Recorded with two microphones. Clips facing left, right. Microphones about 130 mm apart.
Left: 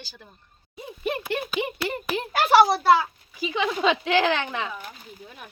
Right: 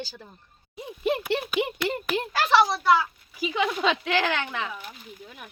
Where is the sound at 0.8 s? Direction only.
20° right (ahead or behind).